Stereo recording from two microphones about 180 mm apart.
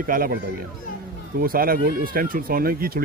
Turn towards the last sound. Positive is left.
turn(degrees=-55)  # may be behind; listen again after turning